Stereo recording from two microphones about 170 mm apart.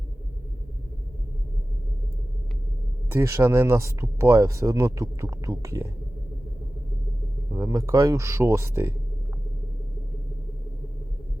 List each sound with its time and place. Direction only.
3.1 s speech: 15° right (ahead or behind)
7.5 s speech: 20° right (ahead or behind)